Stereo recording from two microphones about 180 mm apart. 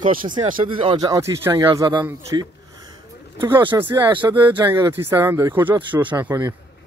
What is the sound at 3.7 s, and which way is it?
Speech, 15° right (ahead or behind).